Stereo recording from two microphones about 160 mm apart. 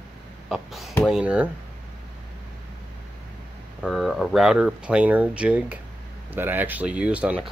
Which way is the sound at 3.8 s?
Centre (ahead or behind).